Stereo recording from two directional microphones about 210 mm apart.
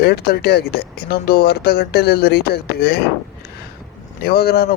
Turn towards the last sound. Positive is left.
turn(degrees=50)  # may be behind; listen again after turning